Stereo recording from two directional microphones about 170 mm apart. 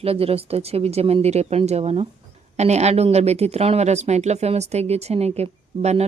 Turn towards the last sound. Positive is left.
turn(degrees=-40)  # may be behind; listen again after turning